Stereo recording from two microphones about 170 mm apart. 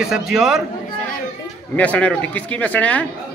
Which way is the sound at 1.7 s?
10° left (ahead or behind).